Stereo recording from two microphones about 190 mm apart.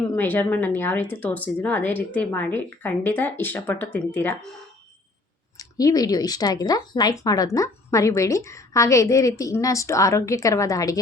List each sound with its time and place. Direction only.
0.2 s speech: 10° left (ahead or behind)
5.5 s speech: 20° left (ahead or behind)